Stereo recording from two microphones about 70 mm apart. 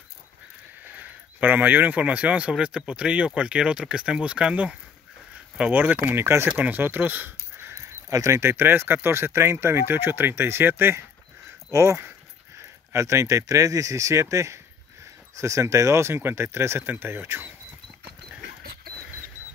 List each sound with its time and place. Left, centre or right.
0.8 s speech: right
5.7 s speech: right
6.2 s speech: right
6.6 s speech: right
7.6 s a sound: right
8.1 s speech: right
8.4 s speech: right
11.7 s speech: right